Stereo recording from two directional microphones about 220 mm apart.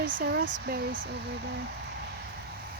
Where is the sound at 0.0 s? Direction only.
40° right (ahead or behind).